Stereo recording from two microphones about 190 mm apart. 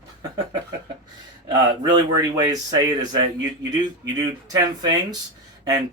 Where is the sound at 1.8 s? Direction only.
20° right (ahead or behind).